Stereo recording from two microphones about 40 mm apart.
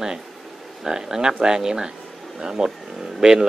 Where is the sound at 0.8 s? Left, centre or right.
Centre.